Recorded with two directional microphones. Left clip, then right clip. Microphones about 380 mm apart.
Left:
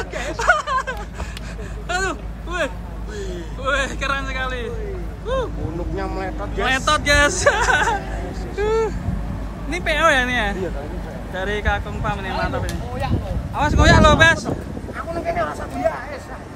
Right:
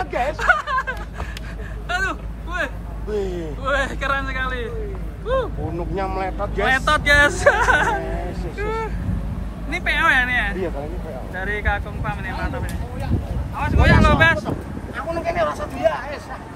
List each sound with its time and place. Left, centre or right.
0.4 s a sound: centre
1.9 s vehicle: centre
3.1 s vehicle: centre
3.6 s a man's voice: centre
5.9 s speech: centre
6.6 s speech: centre
8.5 s vehicle: centre
9.7 s speech: centre
15.2 s hubbub: right